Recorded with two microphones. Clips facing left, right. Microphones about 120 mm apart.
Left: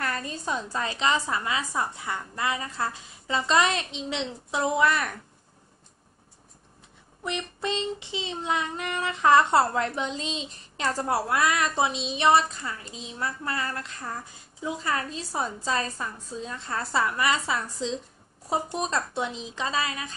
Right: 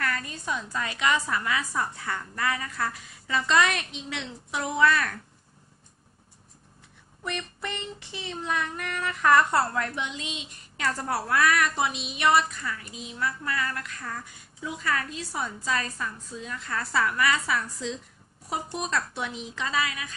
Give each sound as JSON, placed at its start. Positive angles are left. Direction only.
{"t": 0.0, "sound": "a woman's voice", "side_deg": 30}
{"t": 7.2, "sound": "a woman's voice", "side_deg": 20}